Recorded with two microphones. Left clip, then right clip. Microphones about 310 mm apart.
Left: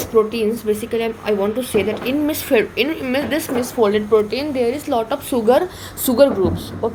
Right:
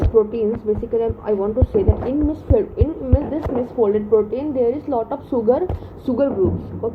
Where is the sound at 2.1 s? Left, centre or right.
Left.